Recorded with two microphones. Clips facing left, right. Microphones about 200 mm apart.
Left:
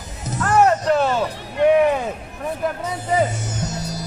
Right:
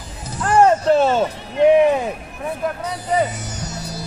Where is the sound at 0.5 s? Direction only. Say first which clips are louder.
Right 2 dB; 35° right (ahead or behind).